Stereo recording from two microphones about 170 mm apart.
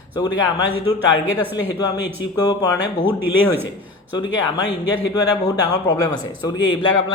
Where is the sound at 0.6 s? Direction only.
10° right (ahead or behind).